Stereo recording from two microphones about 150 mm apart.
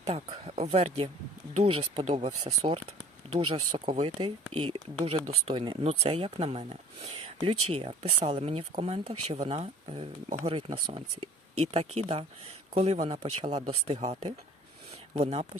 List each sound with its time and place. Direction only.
0.0 s speech: 45° right (ahead or behind)